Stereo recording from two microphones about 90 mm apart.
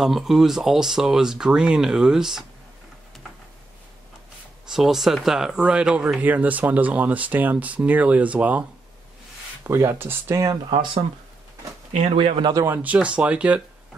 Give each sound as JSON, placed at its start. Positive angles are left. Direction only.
{"t": 0.0, "sound": "speech", "side_deg": -5}
{"t": 4.6, "sound": "speech", "side_deg": -5}
{"t": 9.6, "sound": "speech", "side_deg": -30}
{"t": 12.2, "sound": "speech", "side_deg": -90}
{"t": 12.5, "sound": "speech", "side_deg": -30}
{"t": 12.8, "sound": "speech", "side_deg": -15}